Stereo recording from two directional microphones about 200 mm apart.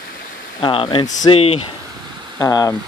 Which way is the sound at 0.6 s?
25° left (ahead or behind).